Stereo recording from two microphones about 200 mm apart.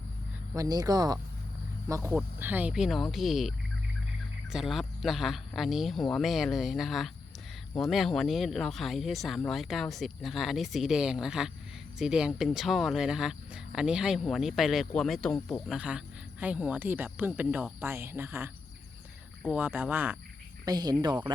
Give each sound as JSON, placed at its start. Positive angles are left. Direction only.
{"t": 0.5, "sound": "speech", "side_deg": -15}
{"t": 19.5, "sound": "speech", "side_deg": -10}